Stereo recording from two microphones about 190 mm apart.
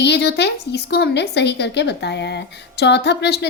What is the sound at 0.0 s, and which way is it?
Speech, 60° left (ahead or behind).